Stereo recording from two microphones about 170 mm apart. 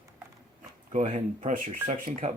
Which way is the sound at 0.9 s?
45° right (ahead or behind).